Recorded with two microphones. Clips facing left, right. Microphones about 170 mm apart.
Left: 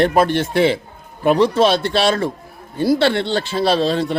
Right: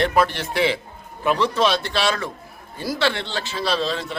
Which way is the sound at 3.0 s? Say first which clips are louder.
Left 7 dB; 50° left (ahead or behind).